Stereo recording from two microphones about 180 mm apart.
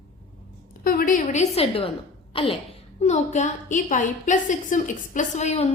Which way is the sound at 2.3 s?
30° left (ahead or behind).